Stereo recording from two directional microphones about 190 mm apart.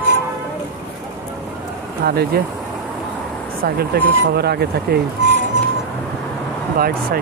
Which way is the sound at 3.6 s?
55° right (ahead or behind).